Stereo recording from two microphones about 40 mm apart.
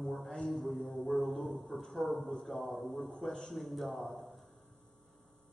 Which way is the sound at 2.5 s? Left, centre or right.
Centre.